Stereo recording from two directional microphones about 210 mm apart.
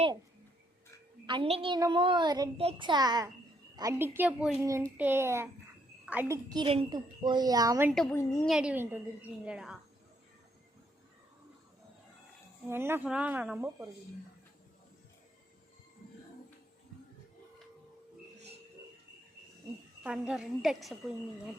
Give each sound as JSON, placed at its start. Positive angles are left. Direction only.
{"t": 1.3, "sound": "a child's voice", "side_deg": -25}
{"t": 7.9, "sound": "a woman's voice", "side_deg": 0}
{"t": 8.1, "sound": "a woman's voice", "side_deg": 15}
{"t": 8.4, "sound": "a woman's voice", "side_deg": -5}
{"t": 12.6, "sound": "a woman's voice", "side_deg": -10}
{"t": 20.1, "sound": "a woman's voice", "side_deg": -5}